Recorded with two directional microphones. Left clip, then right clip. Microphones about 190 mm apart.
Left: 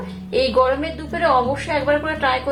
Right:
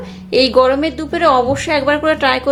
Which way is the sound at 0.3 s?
50° right (ahead or behind).